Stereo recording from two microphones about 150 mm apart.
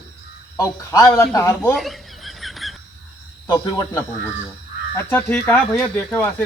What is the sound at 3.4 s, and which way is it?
Speech, 30° left (ahead or behind).